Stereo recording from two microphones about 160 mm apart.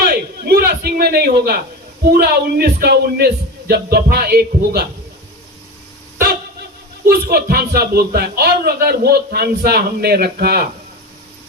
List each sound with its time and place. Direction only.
0.1 s a sound: 75° right (ahead or behind)
2.1 s speech: 75° right (ahead or behind)
7.0 s speech: 70° right (ahead or behind)